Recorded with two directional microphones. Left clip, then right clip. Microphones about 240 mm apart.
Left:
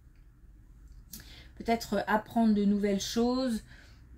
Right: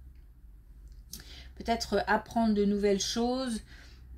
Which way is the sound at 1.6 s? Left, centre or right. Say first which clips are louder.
Right 1 dB; right.